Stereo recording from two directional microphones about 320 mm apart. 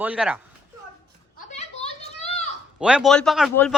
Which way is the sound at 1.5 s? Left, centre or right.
Centre.